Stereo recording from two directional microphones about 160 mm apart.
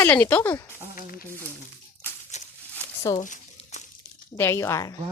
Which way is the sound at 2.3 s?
45° left (ahead or behind).